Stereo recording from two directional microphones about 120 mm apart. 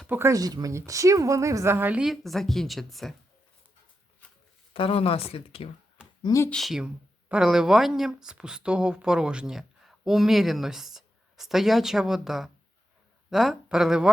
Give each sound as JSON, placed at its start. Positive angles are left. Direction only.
{"t": 0.1, "sound": "speech", "side_deg": -25}
{"t": 4.7, "sound": "speech", "side_deg": 50}
{"t": 6.2, "sound": "speech", "side_deg": 25}
{"t": 6.5, "sound": "a woman's voice", "side_deg": 0}